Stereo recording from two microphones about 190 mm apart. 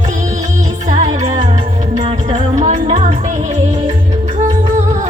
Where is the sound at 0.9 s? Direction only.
35° right (ahead or behind).